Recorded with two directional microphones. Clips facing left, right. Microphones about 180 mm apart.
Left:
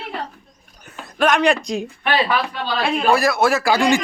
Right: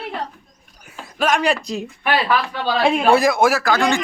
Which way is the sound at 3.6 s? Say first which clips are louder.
Left 2 dB; 15° left (ahead or behind).